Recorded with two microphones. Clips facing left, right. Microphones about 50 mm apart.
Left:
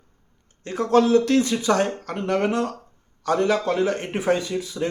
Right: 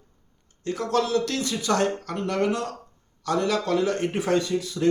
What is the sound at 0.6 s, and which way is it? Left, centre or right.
Speech, left.